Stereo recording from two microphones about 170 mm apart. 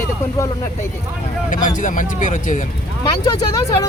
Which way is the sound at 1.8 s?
50° left (ahead or behind).